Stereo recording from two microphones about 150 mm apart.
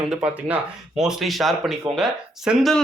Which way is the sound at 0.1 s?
10° right (ahead or behind).